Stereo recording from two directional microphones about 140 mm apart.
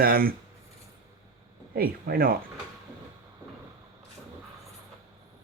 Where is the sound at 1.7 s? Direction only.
90° right.